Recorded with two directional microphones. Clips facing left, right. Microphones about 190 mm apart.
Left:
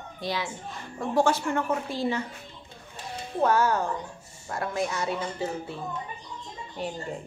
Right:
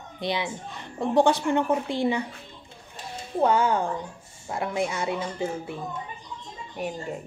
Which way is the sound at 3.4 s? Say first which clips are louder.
Right 1 dB; 15° right (ahead or behind).